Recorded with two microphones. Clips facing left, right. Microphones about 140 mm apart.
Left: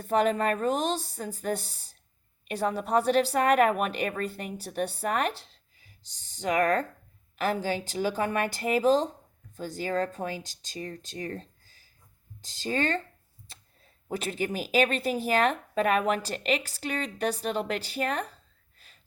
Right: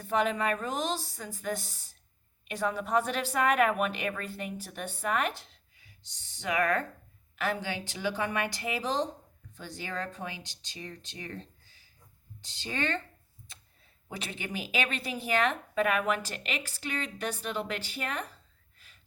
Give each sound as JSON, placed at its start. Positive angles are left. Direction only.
{"t": 0.0, "sound": "speech", "side_deg": 40}
{"t": 14.2, "sound": "speech", "side_deg": 40}